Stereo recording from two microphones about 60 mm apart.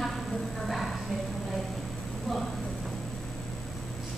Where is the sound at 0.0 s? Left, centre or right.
Centre.